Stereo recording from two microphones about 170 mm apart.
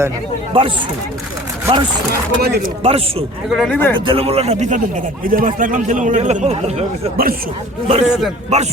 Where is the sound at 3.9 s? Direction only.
30° right (ahead or behind).